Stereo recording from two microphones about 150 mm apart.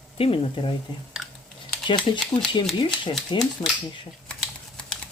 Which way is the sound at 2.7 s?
30° left (ahead or behind).